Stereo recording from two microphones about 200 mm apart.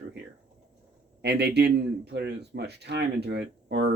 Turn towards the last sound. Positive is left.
turn(degrees=-55)  # may be behind; listen again after turning